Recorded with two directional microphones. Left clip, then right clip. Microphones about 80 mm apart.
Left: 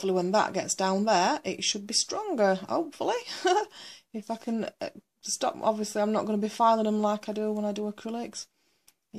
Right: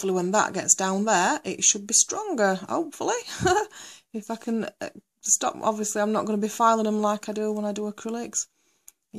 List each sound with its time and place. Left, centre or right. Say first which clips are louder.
0.0 s speech: right 2 dB; right